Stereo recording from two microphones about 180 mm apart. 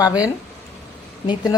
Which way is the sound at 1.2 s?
20° left (ahead or behind).